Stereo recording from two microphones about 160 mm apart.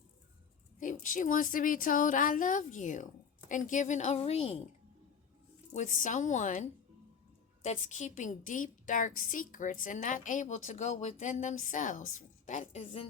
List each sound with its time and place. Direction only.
0.8 s a woman's voice: 55° left (ahead or behind)
5.7 s a woman's voice: 50° left (ahead or behind)